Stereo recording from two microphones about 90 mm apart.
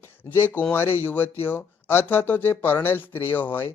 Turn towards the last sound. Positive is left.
turn(degrees=20)  # may be behind; listen again after turning